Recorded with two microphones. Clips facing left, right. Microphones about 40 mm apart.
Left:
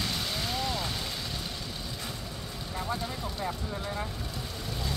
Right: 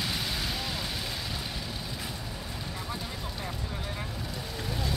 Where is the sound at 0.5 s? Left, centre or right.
Centre.